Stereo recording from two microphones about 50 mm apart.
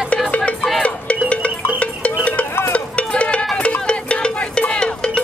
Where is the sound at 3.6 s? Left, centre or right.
Left.